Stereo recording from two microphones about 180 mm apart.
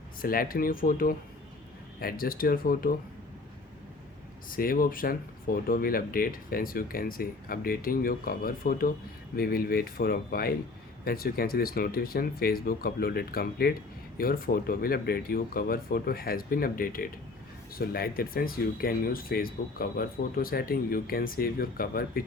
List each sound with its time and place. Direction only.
0.2 s speech: 55° left (ahead or behind)
4.4 s speech: 50° left (ahead or behind)